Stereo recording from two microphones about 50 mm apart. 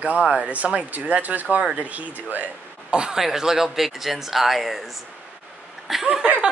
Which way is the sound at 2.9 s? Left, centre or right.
Centre.